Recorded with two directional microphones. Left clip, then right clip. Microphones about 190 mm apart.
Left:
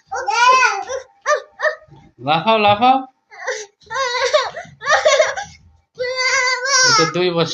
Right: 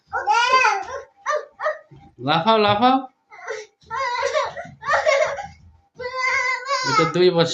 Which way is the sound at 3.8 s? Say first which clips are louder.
Left 4 dB; 55° left (ahead or behind).